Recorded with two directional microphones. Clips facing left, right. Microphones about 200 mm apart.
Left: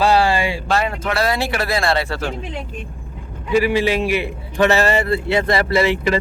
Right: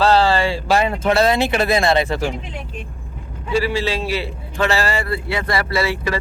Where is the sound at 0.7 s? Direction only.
15° right (ahead or behind).